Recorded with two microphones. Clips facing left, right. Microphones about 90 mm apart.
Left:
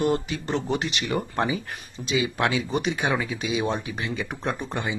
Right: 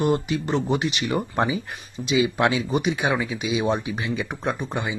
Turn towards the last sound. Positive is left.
turn(degrees=-5)  # may be behind; listen again after turning